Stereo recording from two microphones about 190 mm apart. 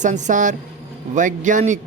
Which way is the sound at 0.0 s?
40° right (ahead or behind).